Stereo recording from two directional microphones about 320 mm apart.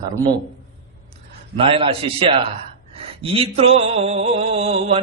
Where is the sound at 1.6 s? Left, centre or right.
Centre.